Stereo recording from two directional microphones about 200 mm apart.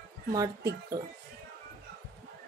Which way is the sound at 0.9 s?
20° right (ahead or behind).